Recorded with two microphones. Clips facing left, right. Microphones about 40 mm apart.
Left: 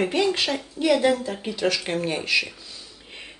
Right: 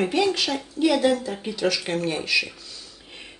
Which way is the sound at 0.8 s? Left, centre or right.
Centre.